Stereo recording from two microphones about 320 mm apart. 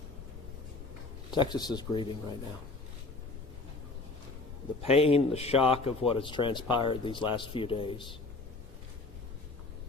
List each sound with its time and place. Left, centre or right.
1.3 s speech: centre
4.8 s speech: centre